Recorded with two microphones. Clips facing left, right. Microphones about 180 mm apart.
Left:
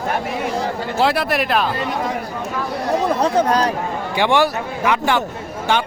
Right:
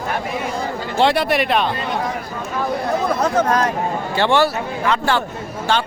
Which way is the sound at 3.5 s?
35° left (ahead or behind).